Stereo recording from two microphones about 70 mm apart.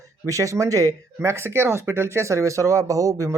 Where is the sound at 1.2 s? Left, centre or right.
Right.